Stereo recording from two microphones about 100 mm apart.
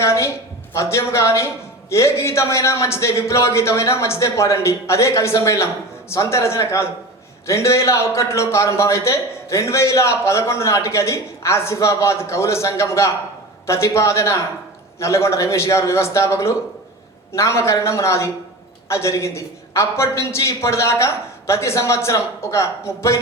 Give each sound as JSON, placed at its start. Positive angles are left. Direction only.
{"t": 0.0, "sound": "a man's voice", "side_deg": 30}